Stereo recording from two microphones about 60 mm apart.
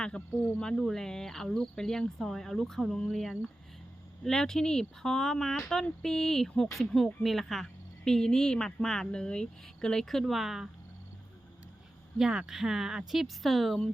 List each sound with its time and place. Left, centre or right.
0.0 s speech: centre
12.2 s speech: centre